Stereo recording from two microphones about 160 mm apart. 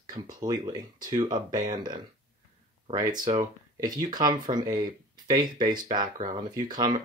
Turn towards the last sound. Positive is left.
turn(degrees=-25)  # may be behind; listen again after turning